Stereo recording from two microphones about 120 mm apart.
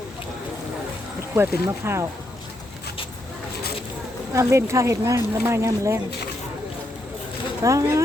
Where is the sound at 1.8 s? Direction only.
20° right (ahead or behind).